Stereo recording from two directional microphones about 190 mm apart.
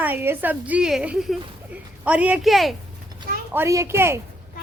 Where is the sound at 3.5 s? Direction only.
15° right (ahead or behind).